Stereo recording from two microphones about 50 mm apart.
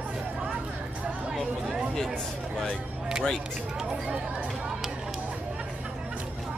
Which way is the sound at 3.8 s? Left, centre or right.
Centre.